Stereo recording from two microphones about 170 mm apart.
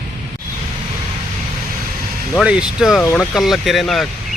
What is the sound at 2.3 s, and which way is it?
Speech, 5° right (ahead or behind).